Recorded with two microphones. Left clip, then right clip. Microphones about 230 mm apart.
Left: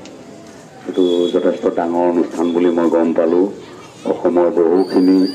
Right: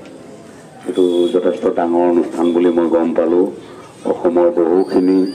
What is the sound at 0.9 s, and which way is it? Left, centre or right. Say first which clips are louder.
Speech: right 1 dB; right.